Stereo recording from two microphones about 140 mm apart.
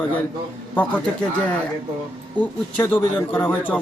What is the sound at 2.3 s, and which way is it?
Speech, 10° left (ahead or behind).